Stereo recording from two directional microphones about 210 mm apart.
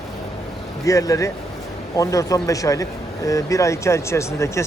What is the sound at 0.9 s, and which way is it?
Speech, 15° left (ahead or behind).